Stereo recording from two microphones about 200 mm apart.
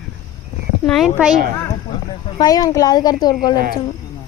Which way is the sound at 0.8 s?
Centre (ahead or behind).